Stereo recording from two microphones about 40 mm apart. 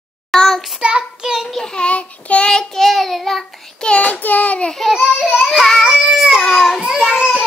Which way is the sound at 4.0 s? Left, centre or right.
Left.